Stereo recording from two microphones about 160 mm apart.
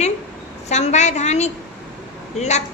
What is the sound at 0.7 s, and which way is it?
A woman's voice, 45° left (ahead or behind).